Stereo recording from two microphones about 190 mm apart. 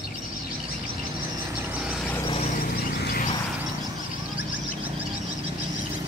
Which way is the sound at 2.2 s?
30° left (ahead or behind).